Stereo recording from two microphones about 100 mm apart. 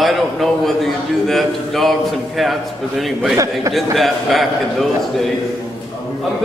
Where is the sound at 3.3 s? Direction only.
30° right (ahead or behind).